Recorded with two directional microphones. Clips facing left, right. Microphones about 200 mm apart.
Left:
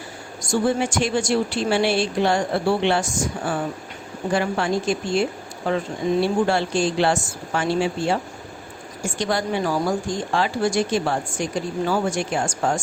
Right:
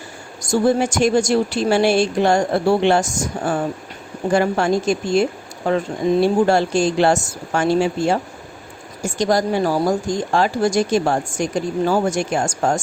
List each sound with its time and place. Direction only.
0.4 s a woman's voice: 40° right (ahead or behind)
6.2 s a woman's voice: 45° right (ahead or behind)